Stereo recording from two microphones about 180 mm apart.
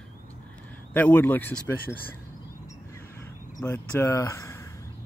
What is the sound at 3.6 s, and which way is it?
Speech, 10° left (ahead or behind).